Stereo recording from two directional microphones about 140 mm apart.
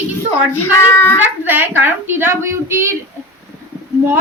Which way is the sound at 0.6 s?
15° left (ahead or behind).